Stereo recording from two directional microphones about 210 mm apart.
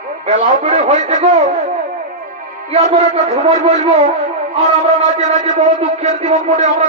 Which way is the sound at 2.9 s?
30° right (ahead or behind).